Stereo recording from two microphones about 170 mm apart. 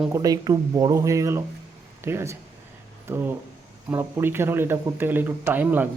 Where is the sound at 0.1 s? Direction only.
20° right (ahead or behind).